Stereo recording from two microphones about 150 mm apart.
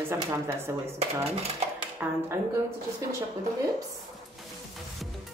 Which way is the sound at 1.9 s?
15° right (ahead or behind).